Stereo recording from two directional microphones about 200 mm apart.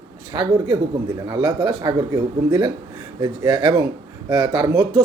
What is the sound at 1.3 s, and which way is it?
Speech, 20° right (ahead or behind).